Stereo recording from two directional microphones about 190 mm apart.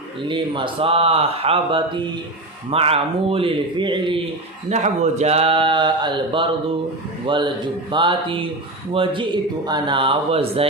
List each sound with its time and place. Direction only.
0.3 s mantra: 25° right (ahead or behind)
4.7 s mantra: 35° right (ahead or behind)